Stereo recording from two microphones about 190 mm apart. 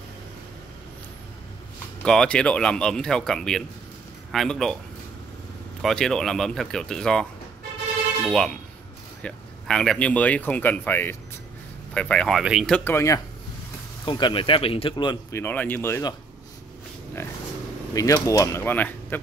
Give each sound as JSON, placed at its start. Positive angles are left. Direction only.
{"t": 2.0, "sound": "speech", "side_deg": 5}
{"t": 5.8, "sound": "speech", "side_deg": 0}
{"t": 8.3, "sound": "speech", "side_deg": 5}
{"t": 14.0, "sound": "speech", "side_deg": 25}
{"t": 15.3, "sound": "speech", "side_deg": 10}
{"t": 17.9, "sound": "speech", "side_deg": 15}